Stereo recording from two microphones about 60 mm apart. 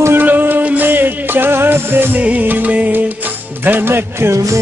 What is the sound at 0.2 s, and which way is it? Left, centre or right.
Music, right.